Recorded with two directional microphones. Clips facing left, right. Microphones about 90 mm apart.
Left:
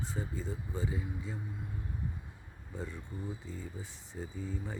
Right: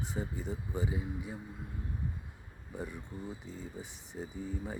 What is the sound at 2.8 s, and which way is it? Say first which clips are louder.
Speech: right 1 dB; 15° right (ahead or behind).